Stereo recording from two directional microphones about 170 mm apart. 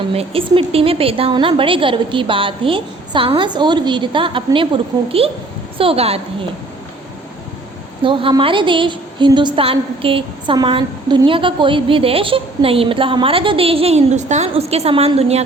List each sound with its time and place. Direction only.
0.1 s a woman's voice: 35° right (ahead or behind)
8.0 s a woman's voice: 30° right (ahead or behind)